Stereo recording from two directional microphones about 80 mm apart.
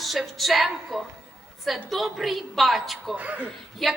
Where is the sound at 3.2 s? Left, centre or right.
Centre.